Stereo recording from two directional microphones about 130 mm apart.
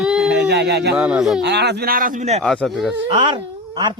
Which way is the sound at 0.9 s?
5° right (ahead or behind).